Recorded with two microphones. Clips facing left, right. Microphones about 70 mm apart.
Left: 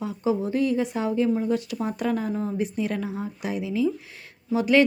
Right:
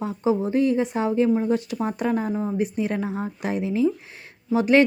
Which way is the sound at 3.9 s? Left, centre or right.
Right.